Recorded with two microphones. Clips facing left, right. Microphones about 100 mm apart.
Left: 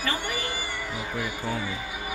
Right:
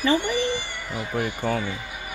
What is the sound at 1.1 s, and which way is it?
Speech, 55° right (ahead or behind).